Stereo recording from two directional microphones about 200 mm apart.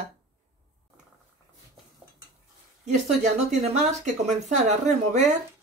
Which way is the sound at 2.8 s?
35° right (ahead or behind).